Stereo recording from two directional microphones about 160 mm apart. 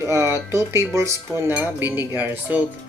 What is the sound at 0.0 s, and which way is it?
Speech, 20° right (ahead or behind).